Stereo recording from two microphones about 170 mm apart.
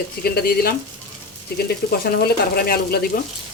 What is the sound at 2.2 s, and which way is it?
Speech, 65° left (ahead or behind).